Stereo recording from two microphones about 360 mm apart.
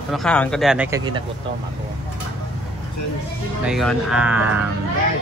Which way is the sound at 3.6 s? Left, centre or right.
Centre.